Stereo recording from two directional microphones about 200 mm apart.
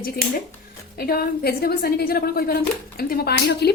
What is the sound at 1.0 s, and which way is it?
A woman's voice, 50° left (ahead or behind).